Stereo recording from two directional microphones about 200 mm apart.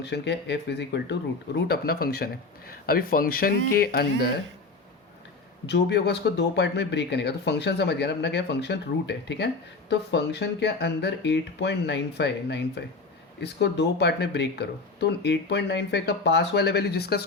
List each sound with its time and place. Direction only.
0.0 s speech: 60° left (ahead or behind)
5.6 s speech: 55° left (ahead or behind)